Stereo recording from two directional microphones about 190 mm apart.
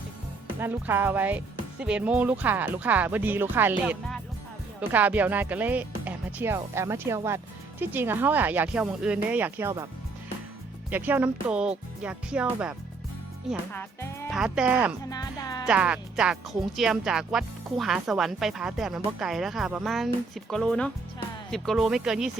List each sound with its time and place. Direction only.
0.6 s speech: 10° right (ahead or behind)
10.9 s speech: 10° right (ahead or behind)
15.1 s speech: 20° left (ahead or behind)
15.6 s speech: 5° right (ahead or behind)